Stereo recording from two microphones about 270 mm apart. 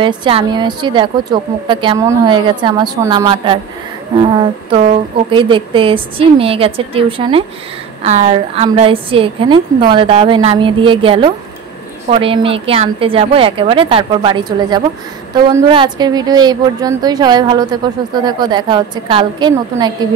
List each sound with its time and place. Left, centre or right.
0.0 s a woman's voice: centre